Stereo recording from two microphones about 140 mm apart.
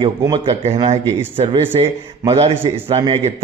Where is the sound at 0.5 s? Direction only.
45° right (ahead or behind).